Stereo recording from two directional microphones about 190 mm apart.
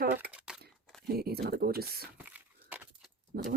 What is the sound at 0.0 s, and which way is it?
Crumpling, 55° right (ahead or behind).